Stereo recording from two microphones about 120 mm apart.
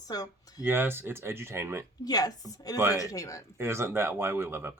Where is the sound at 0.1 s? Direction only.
35° left (ahead or behind).